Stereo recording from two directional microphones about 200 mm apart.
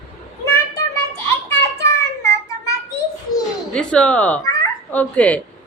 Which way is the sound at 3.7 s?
5° left (ahead or behind).